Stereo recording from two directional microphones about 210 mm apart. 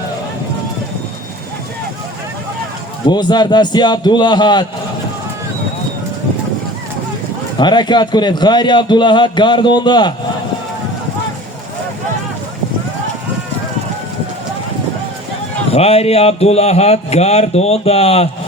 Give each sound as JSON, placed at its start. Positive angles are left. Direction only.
{"t": 3.1, "sound": "a man's voice", "side_deg": 20}
{"t": 7.6, "sound": "a man's voice", "side_deg": 20}
{"t": 15.7, "sound": "a man's voice", "side_deg": 30}